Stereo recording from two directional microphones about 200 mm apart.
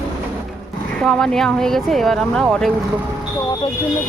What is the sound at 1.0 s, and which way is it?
Speech, 5° left (ahead or behind).